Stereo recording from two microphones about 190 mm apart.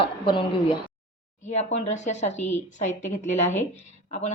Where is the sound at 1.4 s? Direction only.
40° left (ahead or behind).